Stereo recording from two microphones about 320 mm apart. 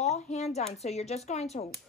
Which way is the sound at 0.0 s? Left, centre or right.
Left.